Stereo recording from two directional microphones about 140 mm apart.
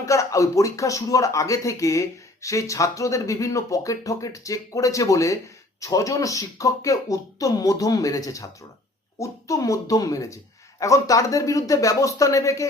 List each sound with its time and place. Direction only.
0.0 s speech: 20° left (ahead or behind)